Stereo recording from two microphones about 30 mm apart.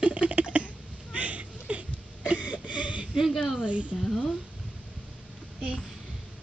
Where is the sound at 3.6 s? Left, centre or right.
Right.